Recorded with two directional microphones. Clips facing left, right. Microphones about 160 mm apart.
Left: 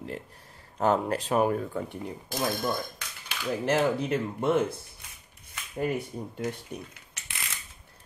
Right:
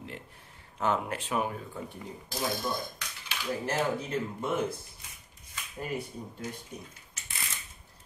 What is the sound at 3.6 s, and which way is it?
Speech, 70° left (ahead or behind).